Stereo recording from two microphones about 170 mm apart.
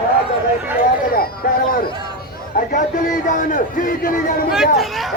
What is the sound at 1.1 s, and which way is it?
A man's voice, 60° left (ahead or behind).